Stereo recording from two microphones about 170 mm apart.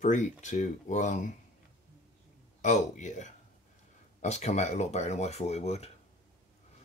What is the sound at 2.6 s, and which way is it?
Speech, 45° left (ahead or behind).